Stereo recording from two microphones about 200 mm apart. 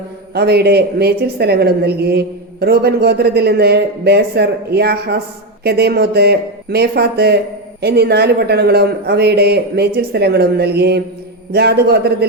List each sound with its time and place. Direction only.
0.3 s speech: 55° right (ahead or behind)